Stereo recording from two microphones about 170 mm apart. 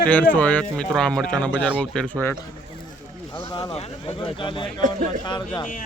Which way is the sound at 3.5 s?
25° left (ahead or behind).